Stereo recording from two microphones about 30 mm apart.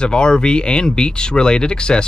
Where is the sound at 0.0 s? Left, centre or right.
Left.